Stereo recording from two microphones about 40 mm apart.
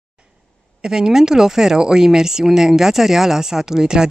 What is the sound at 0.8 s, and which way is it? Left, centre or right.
Speech, centre.